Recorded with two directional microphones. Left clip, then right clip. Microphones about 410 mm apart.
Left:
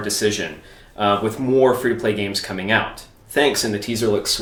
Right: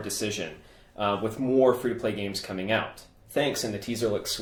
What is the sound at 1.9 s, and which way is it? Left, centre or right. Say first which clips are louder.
Speech: left 9 dB; right.